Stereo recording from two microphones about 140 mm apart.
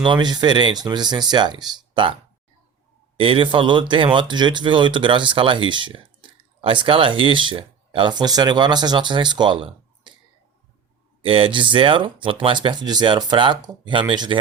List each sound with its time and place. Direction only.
0.0 s speech: 30° right (ahead or behind)
3.2 s speech: 40° right (ahead or behind)
11.2 s speech: 40° right (ahead or behind)